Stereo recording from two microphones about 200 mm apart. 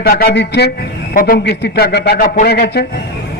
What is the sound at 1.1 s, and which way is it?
A man's voice, 45° left (ahead or behind).